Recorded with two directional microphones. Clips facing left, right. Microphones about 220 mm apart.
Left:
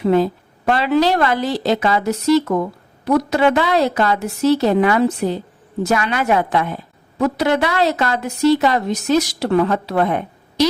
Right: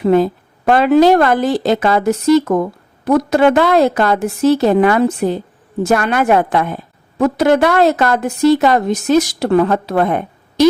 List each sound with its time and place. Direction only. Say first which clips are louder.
0.0 s a woman's voice: right 3 dB; 50° right (ahead or behind)